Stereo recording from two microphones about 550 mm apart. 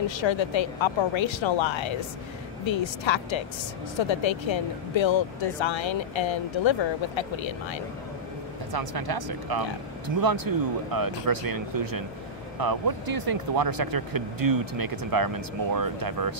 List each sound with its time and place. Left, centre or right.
0.1 s speech: left
8.7 s speech: right